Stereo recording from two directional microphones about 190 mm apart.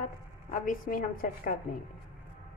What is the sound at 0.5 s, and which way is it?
A woman's voice, 45° left (ahead or behind).